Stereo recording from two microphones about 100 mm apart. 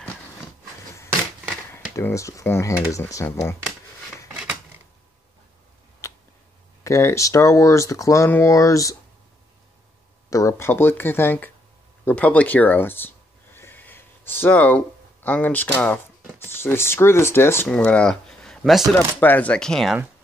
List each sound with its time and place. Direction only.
1.7 s speech: 25° left (ahead or behind)
4.3 s scissors: 10° right (ahead or behind)
6.0 s a sound: 30° left (ahead or behind)
6.8 s speech: 30° left (ahead or behind)
10.3 s speech: 30° left (ahead or behind)
12.0 s a sound: 15° left (ahead or behind)
15.2 s speech: 15° left (ahead or behind)
17.6 s speech: 10° left (ahead or behind)
18.6 s speech: 5° right (ahead or behind)
19.1 s speech: 20° left (ahead or behind)